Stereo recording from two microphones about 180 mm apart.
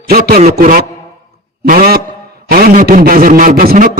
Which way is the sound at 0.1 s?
60° right (ahead or behind).